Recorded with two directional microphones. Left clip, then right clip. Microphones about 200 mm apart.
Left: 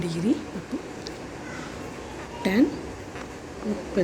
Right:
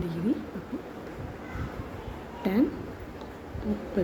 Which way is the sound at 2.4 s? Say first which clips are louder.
Left 4 dB; 15° left (ahead or behind).